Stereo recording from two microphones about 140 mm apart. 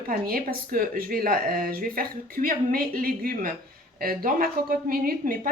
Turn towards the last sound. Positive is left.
turn(degrees=-80)